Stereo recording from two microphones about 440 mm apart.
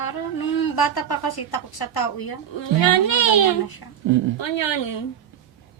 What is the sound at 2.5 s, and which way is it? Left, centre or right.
A child's voice, left.